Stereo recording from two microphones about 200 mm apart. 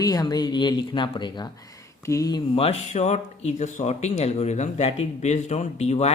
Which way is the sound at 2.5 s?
30° left (ahead or behind).